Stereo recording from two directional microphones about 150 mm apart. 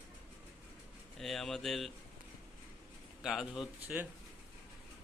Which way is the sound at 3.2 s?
5° right (ahead or behind).